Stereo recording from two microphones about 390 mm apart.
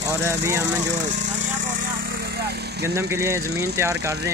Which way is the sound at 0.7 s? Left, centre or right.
Right.